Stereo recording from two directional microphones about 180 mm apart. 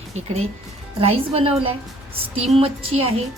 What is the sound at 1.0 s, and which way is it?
Speech, 35° right (ahead or behind).